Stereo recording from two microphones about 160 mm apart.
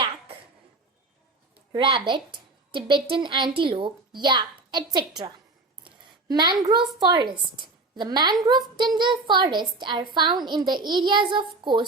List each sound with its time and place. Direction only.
1.7 s a woman's voice: 30° right (ahead or behind)
5.8 s a sound: 25° right (ahead or behind)
7.0 s speech: 25° right (ahead or behind)